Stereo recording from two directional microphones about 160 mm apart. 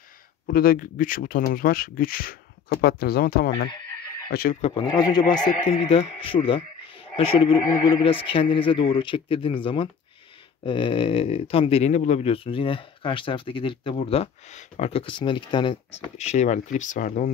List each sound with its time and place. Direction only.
0.5 s speech: 65° left (ahead or behind)
4.6 s speech: 40° left (ahead or behind)
4.8 s speech: 25° left (ahead or behind)
5.7 s speech: 40° left (ahead or behind)
16.2 s speech: 45° left (ahead or behind)